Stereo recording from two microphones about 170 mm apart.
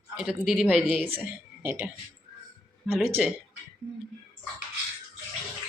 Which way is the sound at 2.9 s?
Centre (ahead or behind).